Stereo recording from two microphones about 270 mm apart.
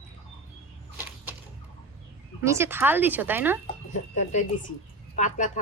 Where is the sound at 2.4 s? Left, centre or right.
Centre.